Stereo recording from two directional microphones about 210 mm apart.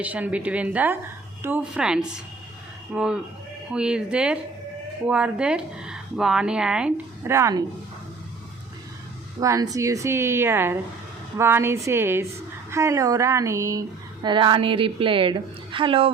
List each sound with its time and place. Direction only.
0.0 s a woman's voice: 5° right (ahead or behind)
9.4 s a woman's voice: 15° right (ahead or behind)